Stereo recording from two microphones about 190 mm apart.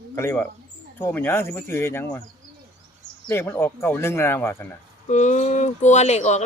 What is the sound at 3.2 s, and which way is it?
Speech, 15° left (ahead or behind).